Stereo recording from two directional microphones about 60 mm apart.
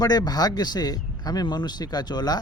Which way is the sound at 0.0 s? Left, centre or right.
Left.